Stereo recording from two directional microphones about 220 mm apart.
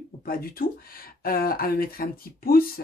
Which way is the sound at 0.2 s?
40° left (ahead or behind).